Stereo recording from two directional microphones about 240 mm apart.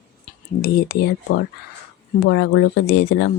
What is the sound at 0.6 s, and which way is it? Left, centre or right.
Speech, left.